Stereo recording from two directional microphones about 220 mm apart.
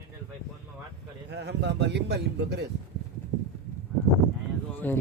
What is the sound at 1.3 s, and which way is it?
A man's voice, 50° right (ahead or behind).